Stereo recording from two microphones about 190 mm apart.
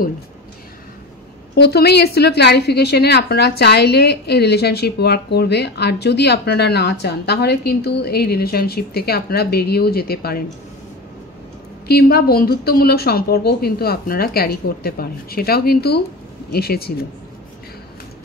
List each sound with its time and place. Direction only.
1.5 s a woman's voice: 55° left (ahead or behind)
11.9 s a woman's voice: 55° left (ahead or behind)